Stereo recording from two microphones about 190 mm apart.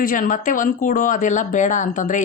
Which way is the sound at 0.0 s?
45° left (ahead or behind).